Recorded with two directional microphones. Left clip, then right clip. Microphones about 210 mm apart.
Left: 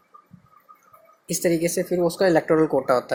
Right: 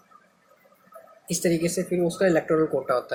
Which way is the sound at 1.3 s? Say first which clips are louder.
Left 3 dB; 25° left (ahead or behind).